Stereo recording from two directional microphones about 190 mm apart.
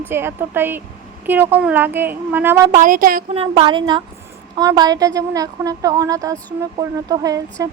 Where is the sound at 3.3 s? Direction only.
30° right (ahead or behind).